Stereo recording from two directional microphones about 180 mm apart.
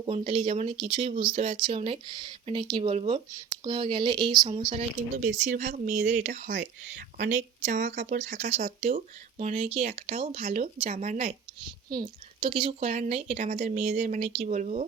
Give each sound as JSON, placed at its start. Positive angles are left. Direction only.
{"t": 0.0, "sound": "speech", "side_deg": -30}
{"t": 5.1, "sound": "speech", "side_deg": -45}
{"t": 11.9, "sound": "speech", "side_deg": -25}